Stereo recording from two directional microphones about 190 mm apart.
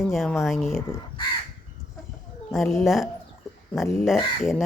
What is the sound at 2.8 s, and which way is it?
Speech, centre (ahead or behind).